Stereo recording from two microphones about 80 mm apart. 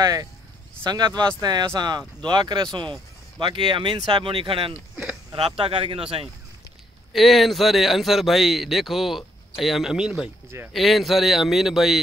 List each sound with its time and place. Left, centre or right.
0.0 s speech: right
3.3 s speech: right
7.1 s a man's voice: centre